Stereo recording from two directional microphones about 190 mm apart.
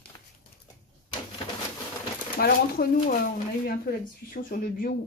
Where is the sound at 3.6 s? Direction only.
50° left (ahead or behind).